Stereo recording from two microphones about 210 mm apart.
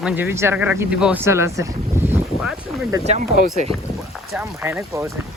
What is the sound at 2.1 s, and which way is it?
Boat, 5° right (ahead or behind).